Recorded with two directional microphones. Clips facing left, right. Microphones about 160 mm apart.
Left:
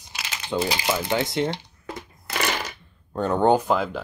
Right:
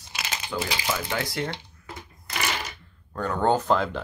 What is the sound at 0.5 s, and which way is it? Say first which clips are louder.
Speech: left 5 dB; 25° left (ahead or behind).